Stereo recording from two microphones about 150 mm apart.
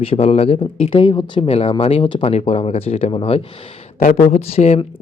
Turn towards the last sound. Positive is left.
turn(degrees=45)  # may be behind; listen again after turning